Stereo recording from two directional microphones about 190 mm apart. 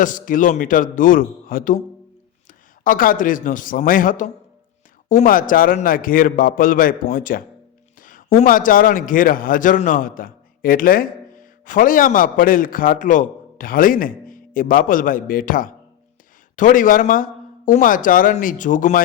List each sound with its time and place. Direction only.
0.0 s a man's voice: 45° left (ahead or behind)